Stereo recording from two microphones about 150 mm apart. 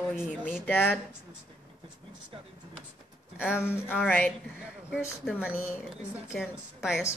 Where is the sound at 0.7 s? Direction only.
15° left (ahead or behind).